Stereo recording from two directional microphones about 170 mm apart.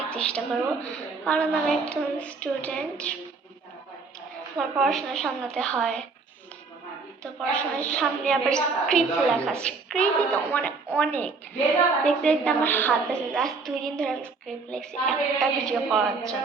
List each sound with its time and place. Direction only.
0.1 s a woman's voice: 5° left (ahead or behind)
4.5 s a woman's voice: centre (ahead or behind)
7.2 s a woman's voice: 5° left (ahead or behind)